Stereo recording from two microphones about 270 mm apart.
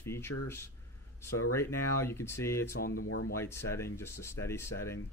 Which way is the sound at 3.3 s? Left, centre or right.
Centre.